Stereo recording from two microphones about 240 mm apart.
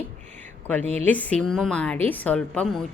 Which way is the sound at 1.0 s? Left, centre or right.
Centre.